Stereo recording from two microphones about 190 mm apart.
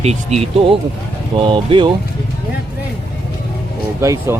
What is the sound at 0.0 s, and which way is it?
Speech, 35° right (ahead or behind).